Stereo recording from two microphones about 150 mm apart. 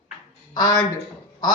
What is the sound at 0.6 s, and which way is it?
Speech, 25° left (ahead or behind).